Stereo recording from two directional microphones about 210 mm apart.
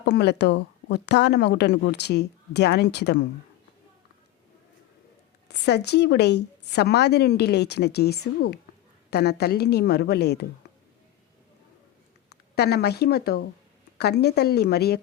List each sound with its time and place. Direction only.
0.0 s speech: 55° left (ahead or behind)
5.5 s speech: 50° left (ahead or behind)
12.3 s speech: 50° left (ahead or behind)